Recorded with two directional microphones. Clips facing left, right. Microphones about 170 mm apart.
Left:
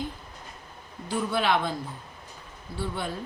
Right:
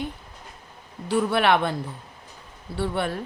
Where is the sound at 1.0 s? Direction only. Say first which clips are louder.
Right 5 dB; 65° right (ahead or behind).